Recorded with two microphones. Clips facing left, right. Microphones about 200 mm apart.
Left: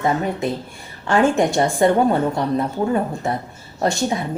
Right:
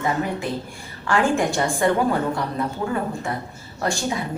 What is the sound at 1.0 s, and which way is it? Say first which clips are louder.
A woman's voice: left 4 dB; 25° left (ahead or behind).